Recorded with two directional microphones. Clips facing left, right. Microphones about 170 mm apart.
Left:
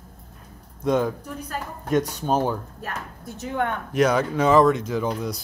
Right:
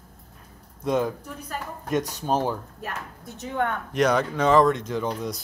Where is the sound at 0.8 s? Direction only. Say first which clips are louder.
Left 2 dB; centre (ahead or behind).